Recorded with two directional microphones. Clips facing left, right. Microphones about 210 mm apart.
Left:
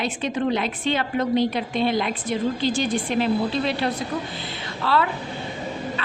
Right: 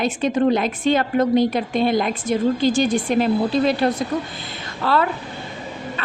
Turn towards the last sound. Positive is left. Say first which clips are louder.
# right 2 dB
turn(degrees=-45)  # may be behind; listen again after turning